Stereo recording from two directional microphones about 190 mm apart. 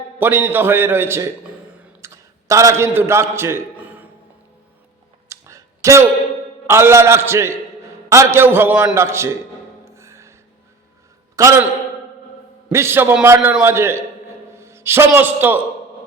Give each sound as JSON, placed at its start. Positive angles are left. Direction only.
{"t": 0.2, "sound": "a man's voice", "side_deg": -10}
{"t": 1.8, "sound": "a sound", "side_deg": -10}
{"t": 5.3, "sound": "a sound", "side_deg": -15}
{"t": 6.7, "sound": "a man's voice", "side_deg": -15}
{"t": 9.8, "sound": "music", "side_deg": -15}
{"t": 11.3, "sound": "a man's voice", "side_deg": -15}